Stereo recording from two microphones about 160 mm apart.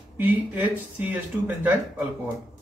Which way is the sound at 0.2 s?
10° right (ahead or behind).